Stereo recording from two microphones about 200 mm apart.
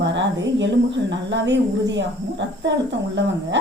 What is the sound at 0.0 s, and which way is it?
Speech, 65° right (ahead or behind).